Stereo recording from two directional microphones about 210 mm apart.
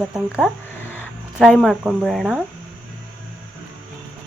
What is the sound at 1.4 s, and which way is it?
Speech, centre (ahead or behind).